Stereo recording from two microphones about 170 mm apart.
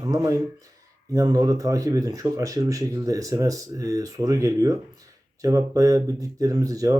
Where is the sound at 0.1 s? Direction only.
20° right (ahead or behind).